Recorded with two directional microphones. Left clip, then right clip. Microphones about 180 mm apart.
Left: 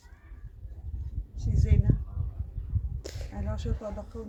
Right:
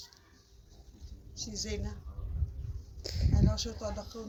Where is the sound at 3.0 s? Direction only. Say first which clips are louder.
Right 2 dB; 15° left (ahead or behind).